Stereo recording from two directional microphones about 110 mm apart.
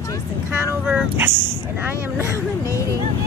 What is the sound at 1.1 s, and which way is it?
Speech, 20° right (ahead or behind).